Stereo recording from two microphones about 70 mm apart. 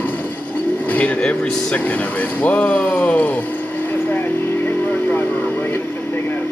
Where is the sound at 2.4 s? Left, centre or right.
Left.